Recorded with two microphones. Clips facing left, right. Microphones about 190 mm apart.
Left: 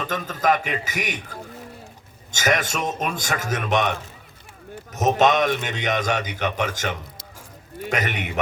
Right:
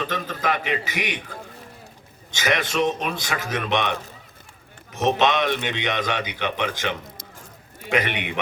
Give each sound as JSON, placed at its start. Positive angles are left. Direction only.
{"t": 0.0, "sound": "speech", "side_deg": 45}
{"t": 2.3, "sound": "speech", "side_deg": 45}
{"t": 4.9, "sound": "speech", "side_deg": 45}